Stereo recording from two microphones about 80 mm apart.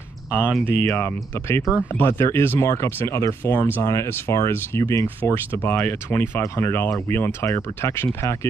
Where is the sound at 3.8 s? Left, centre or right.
Left.